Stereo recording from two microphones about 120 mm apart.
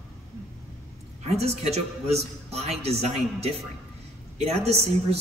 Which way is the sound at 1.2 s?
60° right (ahead or behind).